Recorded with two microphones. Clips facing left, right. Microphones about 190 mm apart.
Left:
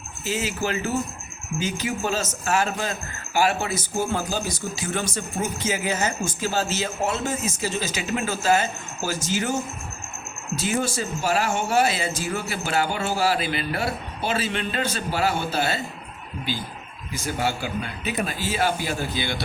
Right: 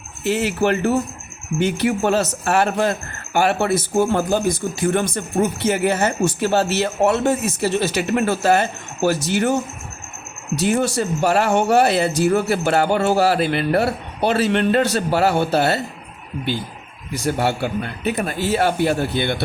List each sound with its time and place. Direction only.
0.3 s a man's voice: 65° right (ahead or behind)
17.1 s a man's voice: 65° right (ahead or behind)